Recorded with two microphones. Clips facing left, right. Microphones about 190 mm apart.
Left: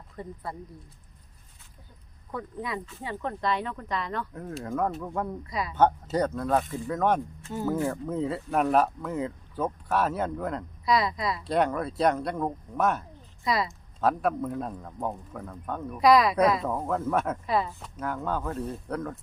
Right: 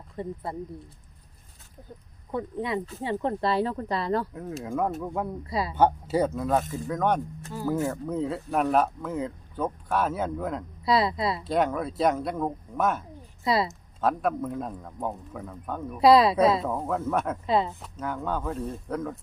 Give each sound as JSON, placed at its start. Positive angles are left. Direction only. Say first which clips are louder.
{"t": 0.2, "sound": "speech", "louder": "right 6 dB", "side_deg": -25}
{"t": 2.3, "sound": "speech", "louder": "right 5 dB", "side_deg": -25}
{"t": 4.6, "sound": "speech", "louder": "right 1 dB", "side_deg": -5}
{"t": 5.5, "sound": "speech", "louder": "right 3 dB", "side_deg": -30}
{"t": 5.7, "sound": "speech", "louder": "even", "side_deg": -10}
{"t": 10.8, "sound": "speech", "louder": "right 2 dB", "side_deg": -30}
{"t": 11.4, "sound": "speech", "louder": "left 1 dB", "side_deg": 0}
{"t": 13.4, "sound": "a woman's voice", "louder": "right 3 dB", "side_deg": -30}
{"t": 14.0, "sound": "speech", "louder": "even", "side_deg": 0}
{"t": 16.0, "sound": "speech", "louder": "right 2 dB", "side_deg": -30}
{"t": 16.6, "sound": "speech", "louder": "even", "side_deg": 0}
{"t": 17.4, "sound": "speech", "louder": "right 3 dB", "side_deg": -25}
{"t": 18.0, "sound": "speech", "louder": "even", "side_deg": 0}